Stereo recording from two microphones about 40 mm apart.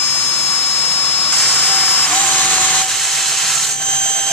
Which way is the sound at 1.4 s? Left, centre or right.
Centre.